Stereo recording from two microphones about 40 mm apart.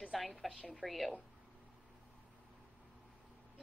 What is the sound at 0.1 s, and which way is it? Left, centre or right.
A woman's voice, centre.